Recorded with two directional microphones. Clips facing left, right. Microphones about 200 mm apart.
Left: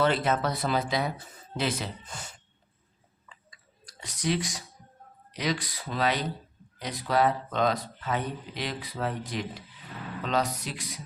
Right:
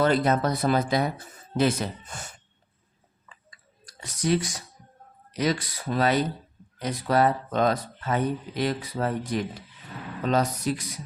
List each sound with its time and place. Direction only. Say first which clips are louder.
0.0 s speech: right 3 dB; 40° right (ahead or behind)
4.0 s speech: right 4 dB; 45° right (ahead or behind)